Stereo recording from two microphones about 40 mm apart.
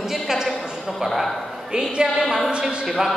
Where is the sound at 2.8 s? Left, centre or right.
Centre.